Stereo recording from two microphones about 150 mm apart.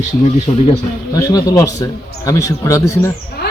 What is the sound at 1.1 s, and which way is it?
Speech, 25° left (ahead or behind).